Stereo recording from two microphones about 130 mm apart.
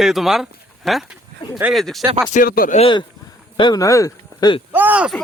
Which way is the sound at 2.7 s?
40° left (ahead or behind).